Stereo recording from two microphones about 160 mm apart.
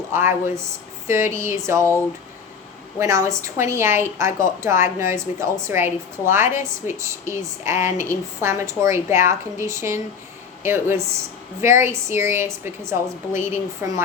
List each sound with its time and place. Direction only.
0.1 s a woman's voice: 15° right (ahead or behind)
3.0 s a woman's voice: 20° right (ahead or behind)